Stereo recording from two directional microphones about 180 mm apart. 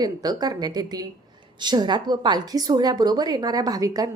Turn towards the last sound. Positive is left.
turn(degrees=-20)  # may be behind; listen again after turning